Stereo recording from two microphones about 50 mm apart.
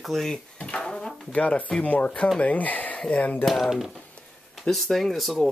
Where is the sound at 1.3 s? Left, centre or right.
Left.